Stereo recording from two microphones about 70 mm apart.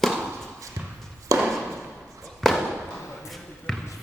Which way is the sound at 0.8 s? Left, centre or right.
Right.